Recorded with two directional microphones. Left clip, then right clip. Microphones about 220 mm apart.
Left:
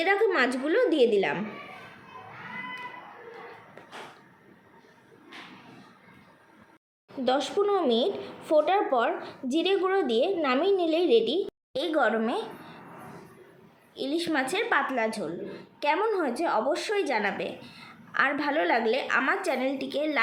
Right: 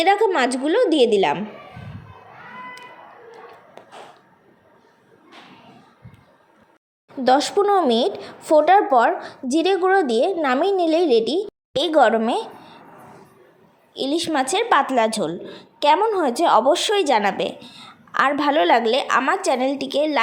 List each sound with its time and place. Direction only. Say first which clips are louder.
0.0 s a woman's voice: right 7 dB; 25° right (ahead or behind)
7.3 s a woman's voice: right 9 dB; 30° right (ahead or behind)
13.9 s a woman's voice: right 7 dB; 25° right (ahead or behind)